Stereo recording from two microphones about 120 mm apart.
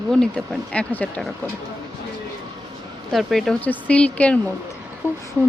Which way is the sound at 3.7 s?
10° left (ahead or behind).